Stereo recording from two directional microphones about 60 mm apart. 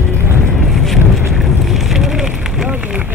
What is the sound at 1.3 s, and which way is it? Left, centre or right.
Vehicle, centre.